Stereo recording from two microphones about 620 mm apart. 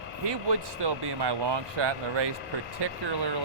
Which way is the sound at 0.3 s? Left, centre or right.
Right.